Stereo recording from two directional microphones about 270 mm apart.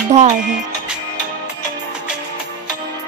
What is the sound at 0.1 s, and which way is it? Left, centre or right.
Speech, right.